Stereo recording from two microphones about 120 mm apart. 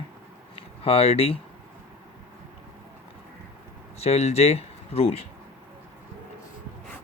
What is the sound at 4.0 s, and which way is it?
Speech, 60° left (ahead or behind).